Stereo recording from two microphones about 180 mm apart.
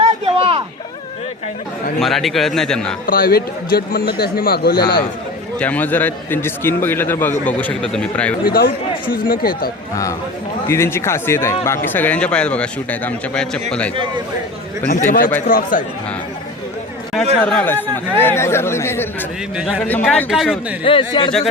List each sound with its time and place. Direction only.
0.0 s a sound: 35° right (ahead or behind)
2.0 s speech: centre (ahead or behind)
3.1 s a man's voice: 55° left (ahead or behind)
5.5 s a man's voice: 10° left (ahead or behind)
8.4 s a man's voice: 55° left (ahead or behind)
9.9 s a man's voice: 20° left (ahead or behind)
14.8 s speech: 50° left (ahead or behind)
17.4 s a man's voice: 10° left (ahead or behind)
20.8 s speech: 30° left (ahead or behind)